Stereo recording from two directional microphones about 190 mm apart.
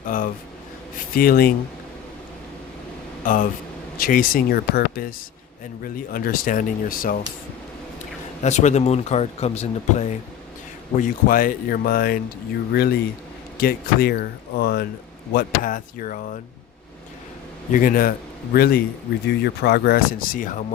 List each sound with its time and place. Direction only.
0.1 s a sound: 45° left (ahead or behind)
1.1 s speech: 50° left (ahead or behind)
3.2 s speech: 45° left (ahead or behind)
8.4 s speech: 40° left (ahead or behind)
17.7 s speech: 45° left (ahead or behind)